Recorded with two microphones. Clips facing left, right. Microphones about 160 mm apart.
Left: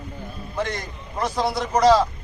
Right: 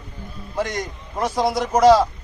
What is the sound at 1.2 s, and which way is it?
Speech, 10° right (ahead or behind).